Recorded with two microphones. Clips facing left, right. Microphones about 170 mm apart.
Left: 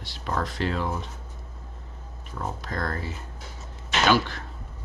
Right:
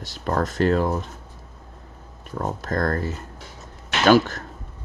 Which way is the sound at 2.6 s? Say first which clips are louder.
Right 10 dB; 45° right (ahead or behind).